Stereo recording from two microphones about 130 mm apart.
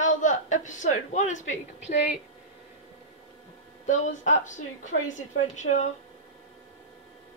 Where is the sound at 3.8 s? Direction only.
70° left (ahead or behind).